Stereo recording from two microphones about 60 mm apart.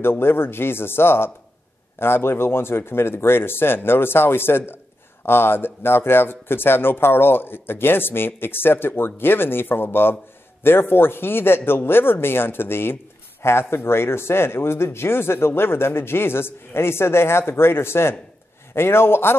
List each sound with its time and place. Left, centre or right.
0.0 s speech: left